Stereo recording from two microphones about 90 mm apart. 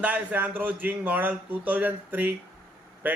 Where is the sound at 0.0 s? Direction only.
15° right (ahead or behind).